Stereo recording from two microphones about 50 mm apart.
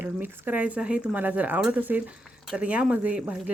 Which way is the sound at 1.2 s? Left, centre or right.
Right.